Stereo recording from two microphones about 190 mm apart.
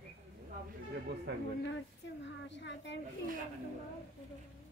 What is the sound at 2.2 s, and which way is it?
Speech, 70° left (ahead or behind).